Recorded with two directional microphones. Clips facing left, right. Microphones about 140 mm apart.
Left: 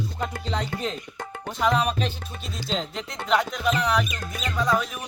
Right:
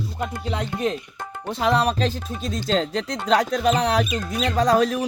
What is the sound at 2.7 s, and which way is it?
Speech, 90° right.